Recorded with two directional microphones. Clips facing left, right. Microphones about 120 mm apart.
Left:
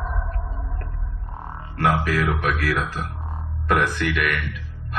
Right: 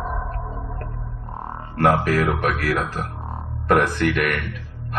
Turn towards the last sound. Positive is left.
turn(degrees=-40)  # may be behind; listen again after turning